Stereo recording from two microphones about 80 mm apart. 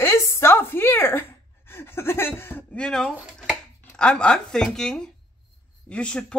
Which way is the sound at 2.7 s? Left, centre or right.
Centre.